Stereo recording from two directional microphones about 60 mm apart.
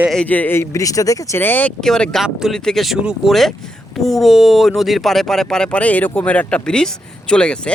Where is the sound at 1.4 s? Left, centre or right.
Left.